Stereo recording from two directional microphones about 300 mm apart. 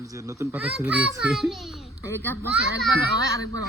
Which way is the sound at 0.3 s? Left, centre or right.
Centre.